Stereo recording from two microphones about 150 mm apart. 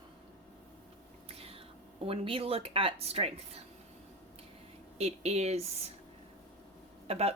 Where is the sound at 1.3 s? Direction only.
40° right (ahead or behind).